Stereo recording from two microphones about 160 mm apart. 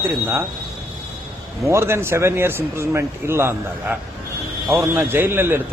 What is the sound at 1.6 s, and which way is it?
Speech, 15° right (ahead or behind).